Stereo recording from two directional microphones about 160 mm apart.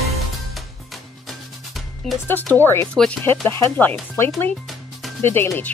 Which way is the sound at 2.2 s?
10° left (ahead or behind).